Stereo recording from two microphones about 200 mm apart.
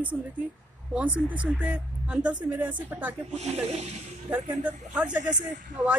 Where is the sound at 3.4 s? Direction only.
35° right (ahead or behind).